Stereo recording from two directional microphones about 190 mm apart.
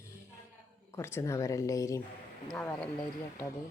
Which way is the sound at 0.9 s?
15° left (ahead or behind).